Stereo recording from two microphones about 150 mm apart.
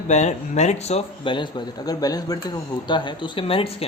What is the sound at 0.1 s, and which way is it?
Speech, 50° left (ahead or behind).